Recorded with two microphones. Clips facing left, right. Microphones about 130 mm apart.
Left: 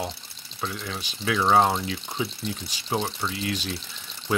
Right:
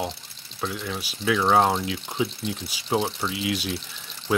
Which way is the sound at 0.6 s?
5° right (ahead or behind).